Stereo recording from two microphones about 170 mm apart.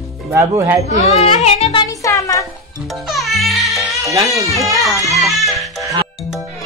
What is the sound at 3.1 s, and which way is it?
Music, centre (ahead or behind).